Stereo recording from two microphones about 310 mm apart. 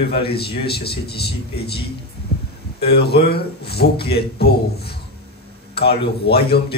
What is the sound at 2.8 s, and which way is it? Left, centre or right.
A man's voice, left.